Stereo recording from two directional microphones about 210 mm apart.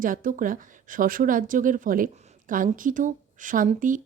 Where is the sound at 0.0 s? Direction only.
40° right (ahead or behind).